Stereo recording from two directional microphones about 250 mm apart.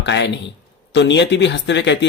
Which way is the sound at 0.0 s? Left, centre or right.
Left.